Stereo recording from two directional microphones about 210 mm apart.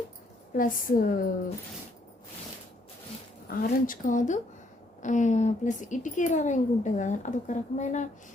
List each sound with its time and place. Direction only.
0.5 s a woman's voice: 40° left (ahead or behind)
3.5 s a woman's voice: 40° left (ahead or behind)